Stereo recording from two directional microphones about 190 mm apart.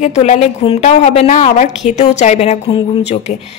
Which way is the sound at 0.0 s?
35° left (ahead or behind).